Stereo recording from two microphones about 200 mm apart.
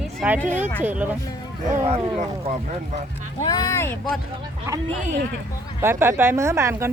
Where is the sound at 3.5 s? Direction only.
20° left (ahead or behind).